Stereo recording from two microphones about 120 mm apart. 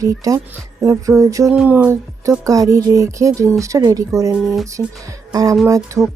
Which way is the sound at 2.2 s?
25° right (ahead or behind).